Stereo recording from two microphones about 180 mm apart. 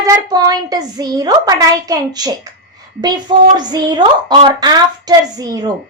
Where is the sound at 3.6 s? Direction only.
25° right (ahead or behind).